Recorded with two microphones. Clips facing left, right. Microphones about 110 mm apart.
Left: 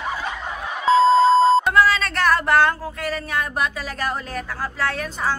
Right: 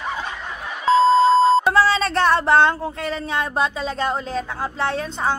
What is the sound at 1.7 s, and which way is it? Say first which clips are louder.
Speech: right 1 dB; 30° right (ahead or behind).